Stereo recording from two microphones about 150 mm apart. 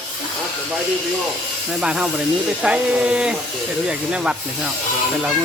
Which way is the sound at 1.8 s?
5° right (ahead or behind).